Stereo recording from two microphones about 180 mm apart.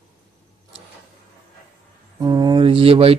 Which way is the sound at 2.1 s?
25° right (ahead or behind).